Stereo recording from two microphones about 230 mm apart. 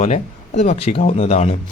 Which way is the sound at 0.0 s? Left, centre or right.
Left.